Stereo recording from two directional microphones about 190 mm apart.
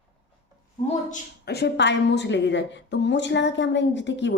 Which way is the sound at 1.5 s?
60° left (ahead or behind).